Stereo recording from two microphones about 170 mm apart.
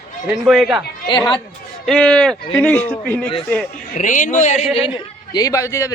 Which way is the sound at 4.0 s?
50° left (ahead or behind).